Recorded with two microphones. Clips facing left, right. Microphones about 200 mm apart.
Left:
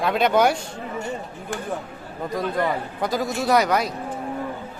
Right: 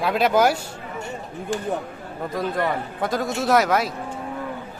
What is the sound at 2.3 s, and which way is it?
Speech, centre (ahead or behind).